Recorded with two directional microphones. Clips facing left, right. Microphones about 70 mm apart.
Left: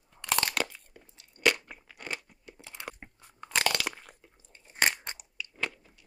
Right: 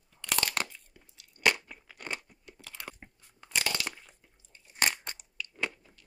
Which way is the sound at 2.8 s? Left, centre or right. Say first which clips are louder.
Left 3 dB; left.